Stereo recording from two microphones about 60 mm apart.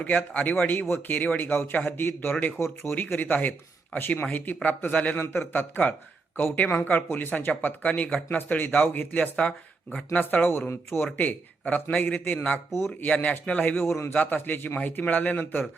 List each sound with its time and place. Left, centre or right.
0.0 s speech: left
9.3 s speech: centre
10.1 s speech: left
13.8 s a man's voice: left
14.1 s speech: left